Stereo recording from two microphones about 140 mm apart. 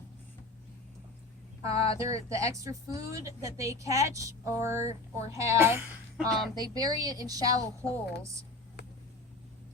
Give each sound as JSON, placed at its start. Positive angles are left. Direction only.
{"t": 1.7, "sound": "speech", "side_deg": 45}
{"t": 2.3, "sound": "a woman's voice", "side_deg": -20}
{"t": 6.1, "sound": "a woman's voice", "side_deg": 0}
{"t": 6.7, "sound": "a woman's voice", "side_deg": -25}